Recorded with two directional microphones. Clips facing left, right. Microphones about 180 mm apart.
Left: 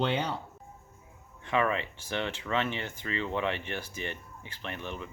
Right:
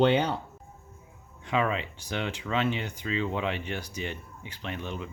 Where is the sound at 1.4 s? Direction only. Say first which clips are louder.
Right 1 dB; 15° right (ahead or behind).